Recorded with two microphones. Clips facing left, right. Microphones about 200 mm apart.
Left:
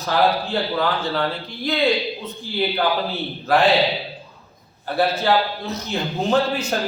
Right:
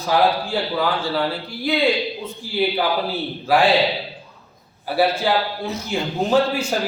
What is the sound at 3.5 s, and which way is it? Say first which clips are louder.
Speech: right 1 dB; 5° right (ahead or behind).